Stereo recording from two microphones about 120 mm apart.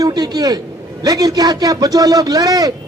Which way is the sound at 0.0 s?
35° right (ahead or behind).